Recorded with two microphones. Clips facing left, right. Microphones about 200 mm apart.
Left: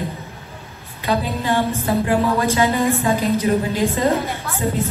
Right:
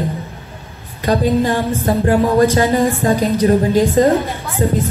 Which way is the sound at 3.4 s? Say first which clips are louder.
Right 6 dB; 45° right (ahead or behind).